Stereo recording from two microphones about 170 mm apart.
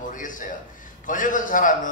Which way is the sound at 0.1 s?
50° left (ahead or behind).